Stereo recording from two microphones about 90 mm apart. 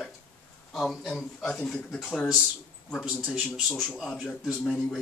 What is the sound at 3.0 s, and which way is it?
Speech, 5° right (ahead or behind).